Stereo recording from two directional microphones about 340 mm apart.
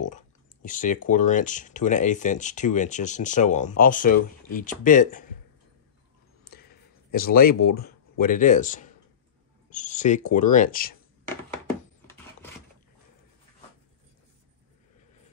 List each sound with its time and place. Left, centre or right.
0.0 s speech: left
6.4 s a sound: left
9.7 s speech: left